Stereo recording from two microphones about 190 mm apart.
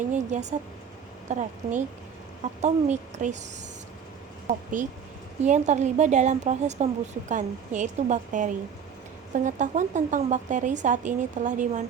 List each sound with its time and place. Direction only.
0.1 s speech: 40° right (ahead or behind)
4.4 s speech: 40° right (ahead or behind)